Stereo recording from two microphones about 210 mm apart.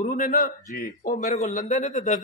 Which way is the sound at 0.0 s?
35° left (ahead or behind).